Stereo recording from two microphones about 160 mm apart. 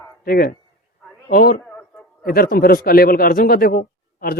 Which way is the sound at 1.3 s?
60° left (ahead or behind).